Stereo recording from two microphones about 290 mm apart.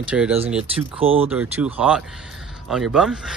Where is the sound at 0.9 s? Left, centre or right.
Centre.